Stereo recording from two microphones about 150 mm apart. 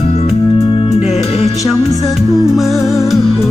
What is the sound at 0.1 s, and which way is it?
Music, 45° left (ahead or behind).